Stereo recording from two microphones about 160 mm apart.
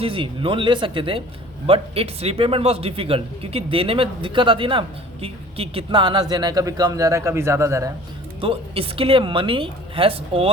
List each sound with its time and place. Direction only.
0.0 s a man's voice: 30° right (ahead or behind)
8.4 s a man's voice: 35° right (ahead or behind)